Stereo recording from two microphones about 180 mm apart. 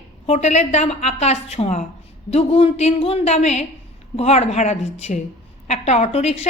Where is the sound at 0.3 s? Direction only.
40° left (ahead or behind).